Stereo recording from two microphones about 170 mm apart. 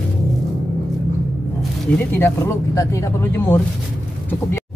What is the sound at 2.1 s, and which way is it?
Speech, 15° left (ahead or behind).